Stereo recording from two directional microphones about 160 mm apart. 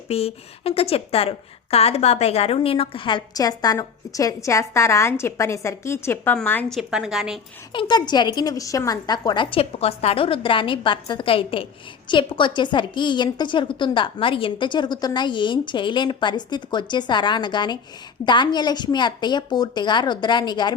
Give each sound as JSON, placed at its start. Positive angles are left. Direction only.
{"t": 0.1, "sound": "a woman's voice", "side_deg": 40}
{"t": 6.7, "sound": "a woman's voice", "side_deg": -5}
{"t": 7.7, "sound": "a woman's voice", "side_deg": 30}